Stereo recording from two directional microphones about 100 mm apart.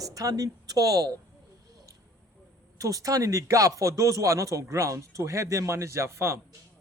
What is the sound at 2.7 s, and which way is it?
Speech, 35° right (ahead or behind).